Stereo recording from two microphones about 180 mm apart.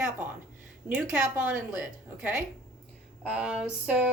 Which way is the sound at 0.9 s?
10° right (ahead or behind).